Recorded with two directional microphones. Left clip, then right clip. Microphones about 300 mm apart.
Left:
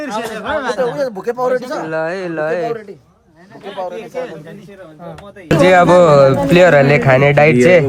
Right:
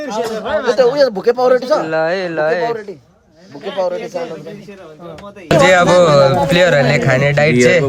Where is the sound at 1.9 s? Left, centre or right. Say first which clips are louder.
Right 3 dB; centre.